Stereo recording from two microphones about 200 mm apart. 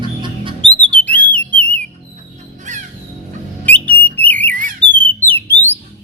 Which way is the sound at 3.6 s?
10° left (ahead or behind).